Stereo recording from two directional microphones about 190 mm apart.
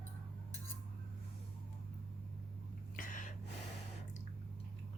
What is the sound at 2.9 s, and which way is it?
Gasp, 45° left (ahead or behind).